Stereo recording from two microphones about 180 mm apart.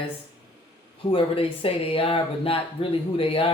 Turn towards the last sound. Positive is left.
turn(degrees=30)  # may be behind; listen again after turning